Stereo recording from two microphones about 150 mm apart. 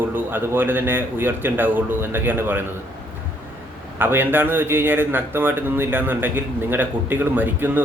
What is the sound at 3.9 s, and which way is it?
A man's voice, 15° right (ahead or behind).